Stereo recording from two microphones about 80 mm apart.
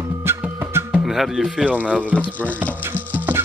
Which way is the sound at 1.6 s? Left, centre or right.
Centre.